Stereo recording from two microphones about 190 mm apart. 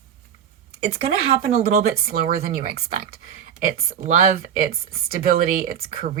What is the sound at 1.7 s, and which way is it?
Speech, 55° right (ahead or behind).